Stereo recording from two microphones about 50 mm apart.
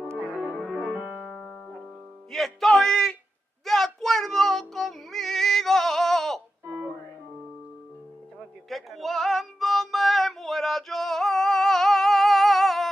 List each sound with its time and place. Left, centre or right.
0.7 s music: centre
2.3 s a man's voice: centre
3.6 s female singing: centre
6.6 s music: right
8.6 s music: centre